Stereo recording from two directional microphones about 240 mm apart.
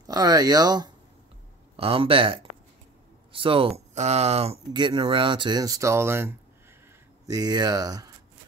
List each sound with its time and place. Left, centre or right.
0.0 s speech: centre